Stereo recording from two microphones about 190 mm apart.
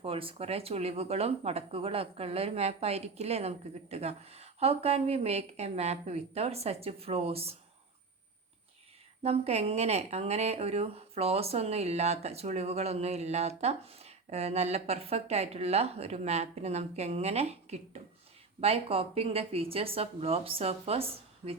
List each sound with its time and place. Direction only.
0.0 s speech: 30° right (ahead or behind)
9.2 s speech: 30° right (ahead or behind)